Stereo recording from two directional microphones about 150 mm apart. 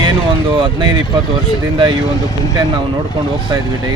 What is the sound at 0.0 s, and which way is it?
Speech, 30° right (ahead or behind).